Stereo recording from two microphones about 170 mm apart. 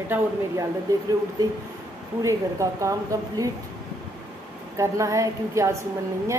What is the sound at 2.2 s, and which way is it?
Speech, 20° right (ahead or behind).